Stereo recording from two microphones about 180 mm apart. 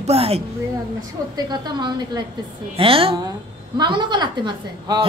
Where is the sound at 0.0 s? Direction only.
35° right (ahead or behind).